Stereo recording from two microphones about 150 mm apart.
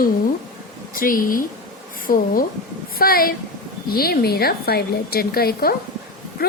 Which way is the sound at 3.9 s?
90° left.